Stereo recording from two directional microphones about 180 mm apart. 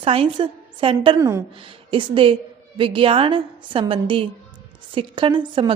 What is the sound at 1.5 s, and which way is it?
A woman's voice, 30° right (ahead or behind).